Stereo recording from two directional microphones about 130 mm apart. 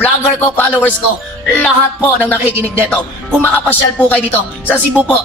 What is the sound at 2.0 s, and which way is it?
Speech, 15° left (ahead or behind).